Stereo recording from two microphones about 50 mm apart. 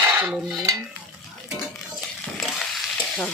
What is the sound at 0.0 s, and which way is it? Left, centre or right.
Cutlery, right.